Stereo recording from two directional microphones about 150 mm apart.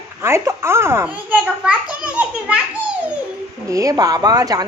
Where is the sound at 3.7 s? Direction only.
20° right (ahead or behind).